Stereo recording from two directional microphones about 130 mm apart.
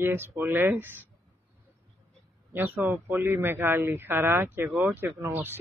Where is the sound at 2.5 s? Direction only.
15° right (ahead or behind).